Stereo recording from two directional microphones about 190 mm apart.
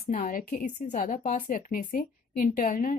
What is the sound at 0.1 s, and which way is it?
A woman's voice, 45° left (ahead or behind).